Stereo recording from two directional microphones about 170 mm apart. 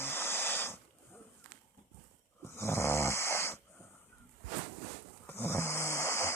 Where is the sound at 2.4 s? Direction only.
15° left (ahead or behind).